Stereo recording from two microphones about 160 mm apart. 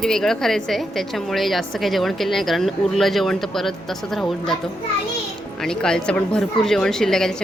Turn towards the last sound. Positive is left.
turn(degrees=5)  # may be behind; listen again after turning